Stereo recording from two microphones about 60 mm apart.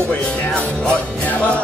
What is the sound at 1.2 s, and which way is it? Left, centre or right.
Music, left.